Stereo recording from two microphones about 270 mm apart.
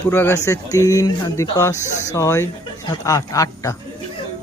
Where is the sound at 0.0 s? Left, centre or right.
Centre.